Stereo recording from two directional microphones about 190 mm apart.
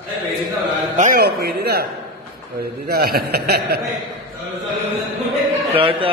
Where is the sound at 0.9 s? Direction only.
45° right (ahead or behind).